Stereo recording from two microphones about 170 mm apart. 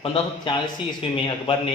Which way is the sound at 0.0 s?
30° left (ahead or behind).